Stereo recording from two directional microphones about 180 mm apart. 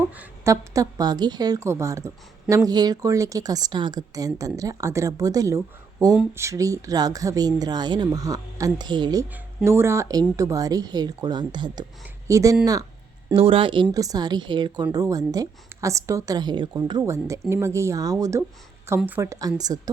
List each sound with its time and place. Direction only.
0.2 s a woman's voice: 15° right (ahead or behind)
9.3 s a woman's voice: 10° right (ahead or behind)
13.3 s a woman's voice: 30° right (ahead or behind)